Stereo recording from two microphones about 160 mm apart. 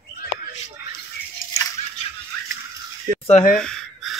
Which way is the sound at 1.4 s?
60° left (ahead or behind).